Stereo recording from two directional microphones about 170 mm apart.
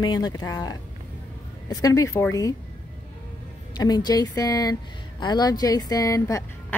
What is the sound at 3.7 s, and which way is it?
A woman's voice, 25° left (ahead or behind).